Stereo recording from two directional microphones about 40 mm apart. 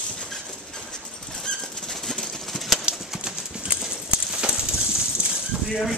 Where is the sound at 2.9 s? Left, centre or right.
Centre.